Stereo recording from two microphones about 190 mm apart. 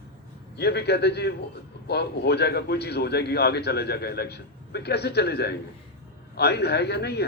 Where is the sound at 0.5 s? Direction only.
60° left (ahead or behind).